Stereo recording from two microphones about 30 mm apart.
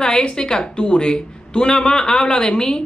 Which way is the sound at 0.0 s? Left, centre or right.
Left.